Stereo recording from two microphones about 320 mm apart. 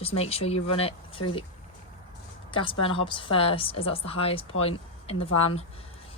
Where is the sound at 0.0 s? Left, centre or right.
Centre.